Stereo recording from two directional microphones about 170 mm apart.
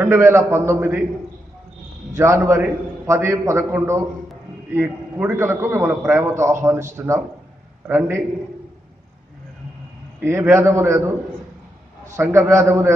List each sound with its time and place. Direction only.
0.0 s a man's voice: 15° right (ahead or behind)
2.1 s a man's voice: 15° right (ahead or behind)
10.2 s a man's voice: 15° right (ahead or behind)